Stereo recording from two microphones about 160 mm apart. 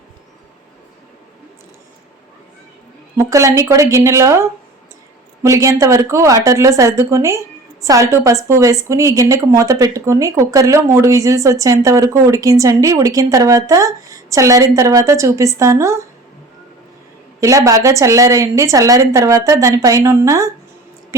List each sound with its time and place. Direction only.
3.2 s speech: 20° right (ahead or behind)
17.4 s speech: 20° right (ahead or behind)